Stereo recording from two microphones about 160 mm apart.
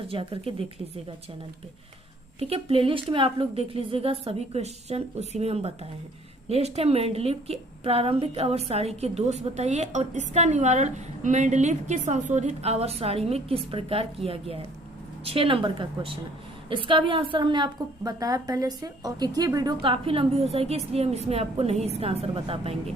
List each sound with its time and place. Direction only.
0.1 s a woman's voice: 35° right (ahead or behind)
2.4 s a woman's voice: 40° right (ahead or behind)